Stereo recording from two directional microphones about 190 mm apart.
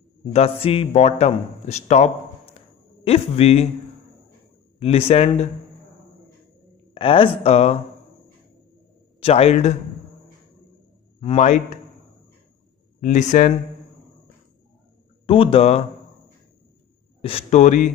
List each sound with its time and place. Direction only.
0.3 s speech: 30° left (ahead or behind)
2.5 s a sound: 30° left (ahead or behind)
4.7 s speech: 30° left (ahead or behind)
6.9 s speech: 30° left (ahead or behind)
9.2 s speech: 35° left (ahead or behind)
11.1 s speech: 35° left (ahead or behind)
13.0 s speech: 40° left (ahead or behind)
15.2 s speech: 30° left (ahead or behind)
17.2 s speech: 30° left (ahead or behind)